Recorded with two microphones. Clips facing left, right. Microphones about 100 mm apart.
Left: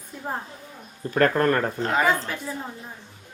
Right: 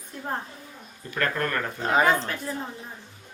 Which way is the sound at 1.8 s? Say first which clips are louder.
Right 1 dB; 15° right (ahead or behind).